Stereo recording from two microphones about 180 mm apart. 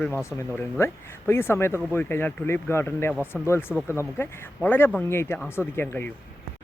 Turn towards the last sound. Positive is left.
turn(degrees=10)  # may be behind; listen again after turning